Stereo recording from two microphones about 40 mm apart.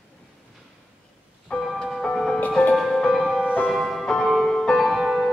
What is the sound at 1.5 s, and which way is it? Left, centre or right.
Music, left.